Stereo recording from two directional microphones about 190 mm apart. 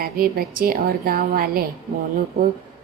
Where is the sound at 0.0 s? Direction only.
50° right (ahead or behind).